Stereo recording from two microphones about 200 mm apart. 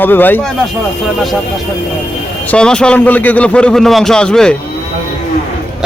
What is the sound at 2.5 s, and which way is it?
A man's voice, 5° left (ahead or behind).